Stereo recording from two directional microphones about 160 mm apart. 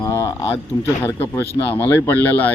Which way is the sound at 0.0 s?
15° left (ahead or behind).